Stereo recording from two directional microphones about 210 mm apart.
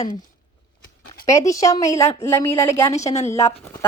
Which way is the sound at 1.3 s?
15° left (ahead or behind).